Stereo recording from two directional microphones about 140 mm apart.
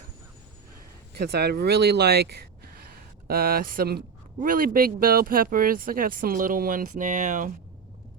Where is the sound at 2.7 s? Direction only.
90° right.